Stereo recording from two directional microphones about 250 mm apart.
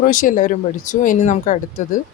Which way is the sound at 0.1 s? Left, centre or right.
Left.